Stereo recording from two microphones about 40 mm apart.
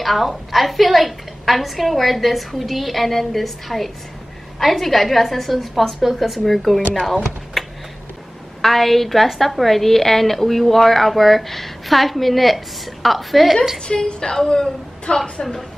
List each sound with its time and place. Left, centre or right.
0.0 s a woman's voice: centre
7.6 s a sound: centre
8.5 s a woman's voice: centre
13.8 s a woman's voice: left